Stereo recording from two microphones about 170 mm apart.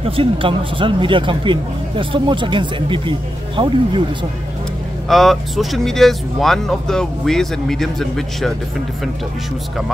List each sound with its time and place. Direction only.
0.0 s speech: 30° right (ahead or behind)
5.0 s speech: centre (ahead or behind)